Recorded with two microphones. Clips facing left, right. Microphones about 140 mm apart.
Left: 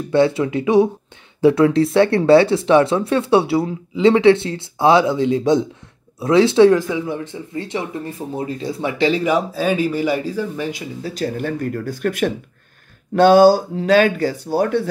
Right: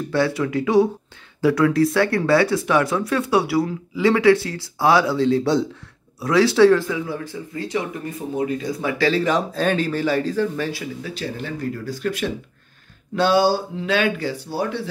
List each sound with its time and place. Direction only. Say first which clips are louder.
0.1 s speech: left 5 dB; 25° left (ahead or behind)
11.0 s speech: left 6 dB; 40° left (ahead or behind)